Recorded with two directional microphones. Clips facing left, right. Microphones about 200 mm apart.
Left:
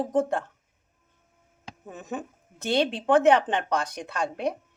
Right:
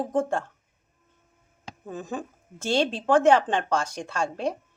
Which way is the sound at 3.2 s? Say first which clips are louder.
Right 1 dB; 20° left (ahead or behind).